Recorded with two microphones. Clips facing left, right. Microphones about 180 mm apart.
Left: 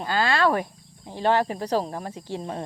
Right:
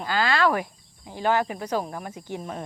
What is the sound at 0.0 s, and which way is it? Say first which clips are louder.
Speech: left 1 dB; 25° left (ahead or behind).